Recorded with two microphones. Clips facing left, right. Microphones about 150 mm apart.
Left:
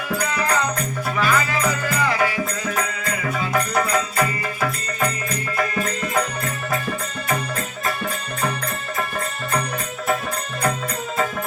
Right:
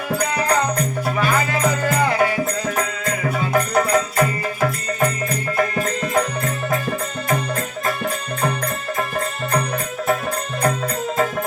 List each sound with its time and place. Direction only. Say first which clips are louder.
0.1 s music: right 3 dB; 40° right (ahead or behind)